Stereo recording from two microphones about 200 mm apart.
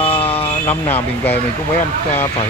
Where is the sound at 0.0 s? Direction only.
30° left (ahead or behind).